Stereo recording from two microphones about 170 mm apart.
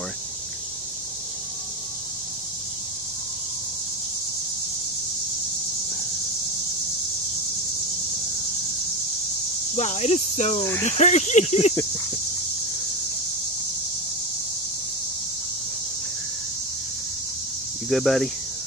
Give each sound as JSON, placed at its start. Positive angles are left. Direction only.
{"t": 9.8, "sound": "speech", "side_deg": 40}
{"t": 17.8, "sound": "speech", "side_deg": 0}